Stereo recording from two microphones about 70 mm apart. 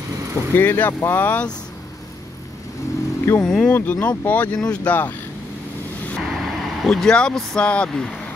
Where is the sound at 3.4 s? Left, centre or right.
Centre.